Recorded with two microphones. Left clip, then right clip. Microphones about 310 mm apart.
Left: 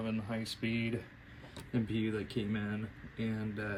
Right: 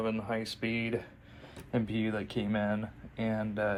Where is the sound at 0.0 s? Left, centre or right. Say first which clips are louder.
Right 6 dB; centre.